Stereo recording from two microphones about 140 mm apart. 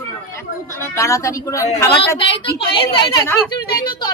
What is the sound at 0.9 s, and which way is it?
Speech, 20° left (ahead or behind).